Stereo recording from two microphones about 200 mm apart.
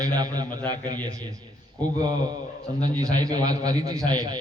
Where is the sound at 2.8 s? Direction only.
20° right (ahead or behind).